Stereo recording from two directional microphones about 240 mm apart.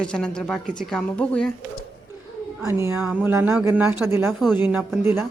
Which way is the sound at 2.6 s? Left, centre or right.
Centre.